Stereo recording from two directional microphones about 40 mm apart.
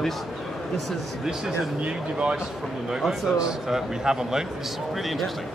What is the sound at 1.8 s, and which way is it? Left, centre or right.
Speech, right.